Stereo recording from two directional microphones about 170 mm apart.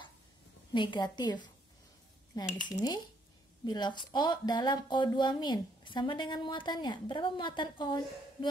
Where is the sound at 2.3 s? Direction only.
25° left (ahead or behind).